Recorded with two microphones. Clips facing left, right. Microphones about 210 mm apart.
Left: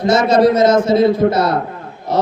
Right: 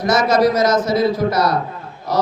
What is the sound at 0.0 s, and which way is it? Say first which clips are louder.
A man's voice: left 3 dB; 25° left (ahead or behind).